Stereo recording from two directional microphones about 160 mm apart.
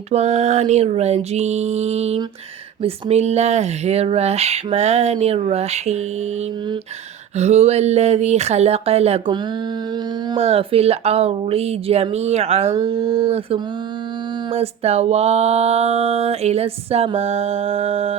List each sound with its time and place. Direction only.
0.1 s speech: 40° right (ahead or behind)
7.3 s speech: 40° right (ahead or behind)
10.3 s a sound: 40° right (ahead or behind)